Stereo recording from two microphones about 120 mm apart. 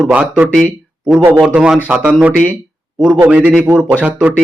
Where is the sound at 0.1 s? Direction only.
10° right (ahead or behind).